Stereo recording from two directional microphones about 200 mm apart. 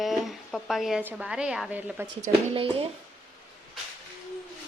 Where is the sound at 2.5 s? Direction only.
25° right (ahead or behind).